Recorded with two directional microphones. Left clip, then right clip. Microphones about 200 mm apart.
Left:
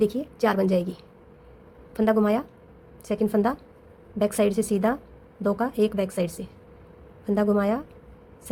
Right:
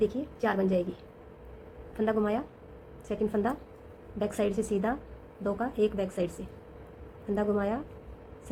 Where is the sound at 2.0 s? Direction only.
45° left (ahead or behind).